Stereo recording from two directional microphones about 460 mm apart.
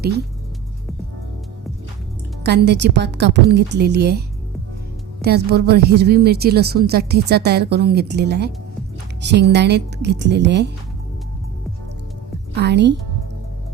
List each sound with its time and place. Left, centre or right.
2.4 s a woman's voice: right
5.2 s a woman's voice: right
12.5 s a woman's voice: right